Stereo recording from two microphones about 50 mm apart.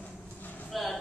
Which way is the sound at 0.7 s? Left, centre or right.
Centre.